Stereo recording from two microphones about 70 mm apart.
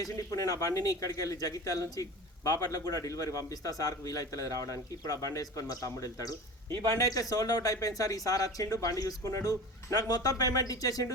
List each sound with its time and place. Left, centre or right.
0.0 s a man's voice: left